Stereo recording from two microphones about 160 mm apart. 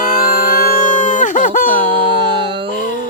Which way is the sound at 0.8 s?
55° left (ahead or behind).